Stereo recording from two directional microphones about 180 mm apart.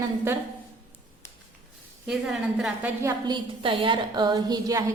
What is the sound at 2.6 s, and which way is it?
Speech, 10° right (ahead or behind).